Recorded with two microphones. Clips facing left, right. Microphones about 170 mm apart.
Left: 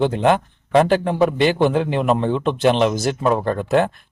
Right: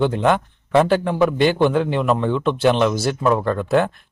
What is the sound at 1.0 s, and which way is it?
Speech, 30° left (ahead or behind).